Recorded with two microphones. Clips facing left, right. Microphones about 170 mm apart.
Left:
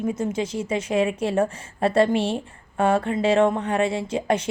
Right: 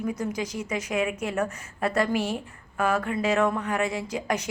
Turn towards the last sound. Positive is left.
turn(degrees=30)  # may be behind; listen again after turning